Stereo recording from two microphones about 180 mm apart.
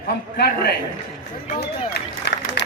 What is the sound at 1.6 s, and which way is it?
Run, 65° left (ahead or behind).